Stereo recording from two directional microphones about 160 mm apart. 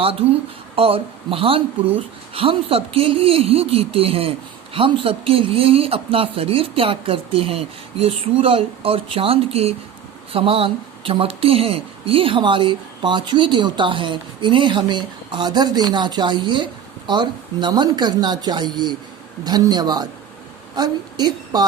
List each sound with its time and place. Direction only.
0.0 s a woman's voice: 35° right (ahead or behind)